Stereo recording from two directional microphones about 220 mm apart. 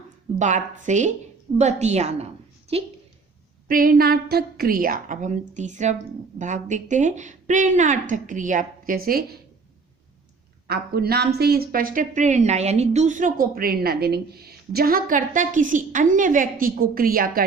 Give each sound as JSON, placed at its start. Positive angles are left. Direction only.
{"t": 0.3, "sound": "a woman's voice", "side_deg": -35}
{"t": 3.7, "sound": "speech", "side_deg": -40}
{"t": 10.7, "sound": "speech", "side_deg": -45}